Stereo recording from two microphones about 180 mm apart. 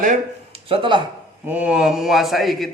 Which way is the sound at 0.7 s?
30° right (ahead or behind).